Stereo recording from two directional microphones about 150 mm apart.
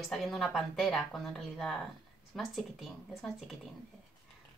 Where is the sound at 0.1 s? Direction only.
Centre (ahead or behind).